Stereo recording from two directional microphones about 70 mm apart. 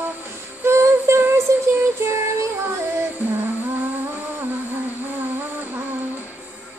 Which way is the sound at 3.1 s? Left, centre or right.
Right.